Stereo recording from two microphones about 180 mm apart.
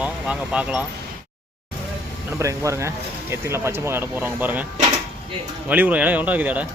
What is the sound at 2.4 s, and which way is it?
Speech, 15° right (ahead or behind).